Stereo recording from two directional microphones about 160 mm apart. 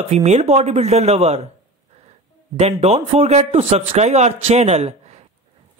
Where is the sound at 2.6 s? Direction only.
40° right (ahead or behind).